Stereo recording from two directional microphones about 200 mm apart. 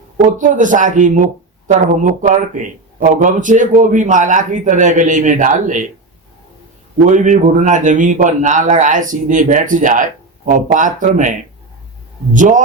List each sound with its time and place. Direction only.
0.3 s speech: 40° right (ahead or behind)
7.0 s speech: 40° right (ahead or behind)